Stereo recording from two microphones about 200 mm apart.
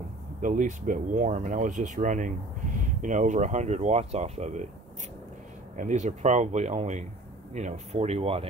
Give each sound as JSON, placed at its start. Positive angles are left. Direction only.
{"t": 0.4, "sound": "speech", "side_deg": -40}
{"t": 5.8, "sound": "speech", "side_deg": -35}